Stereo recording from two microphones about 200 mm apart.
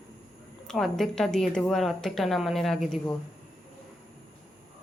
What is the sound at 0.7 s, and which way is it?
A woman's voice, centre (ahead or behind).